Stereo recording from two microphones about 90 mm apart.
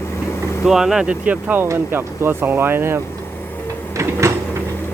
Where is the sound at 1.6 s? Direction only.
30° right (ahead or behind).